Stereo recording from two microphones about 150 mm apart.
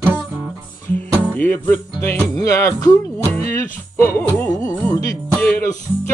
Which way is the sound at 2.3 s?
20° left (ahead or behind).